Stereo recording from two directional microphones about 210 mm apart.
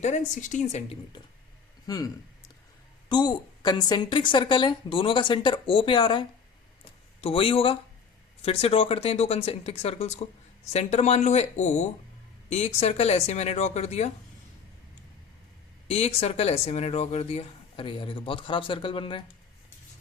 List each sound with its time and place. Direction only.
0.3 s speech: 35° left (ahead or behind)
1.1 s speech: 20° left (ahead or behind)
3.1 s speech: 20° left (ahead or behind)
15.9 s speech: 30° left (ahead or behind)